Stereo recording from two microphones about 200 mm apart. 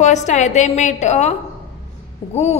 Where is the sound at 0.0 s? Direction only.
35° left (ahead or behind).